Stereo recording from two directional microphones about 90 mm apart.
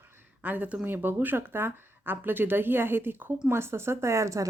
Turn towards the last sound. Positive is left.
turn(degrees=-35)  # may be behind; listen again after turning